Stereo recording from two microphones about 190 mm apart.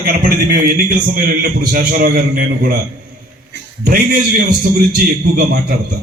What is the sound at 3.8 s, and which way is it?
Speech, 50° right (ahead or behind).